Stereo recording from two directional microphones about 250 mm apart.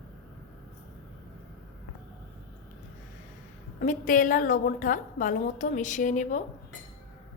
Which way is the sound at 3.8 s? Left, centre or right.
Left.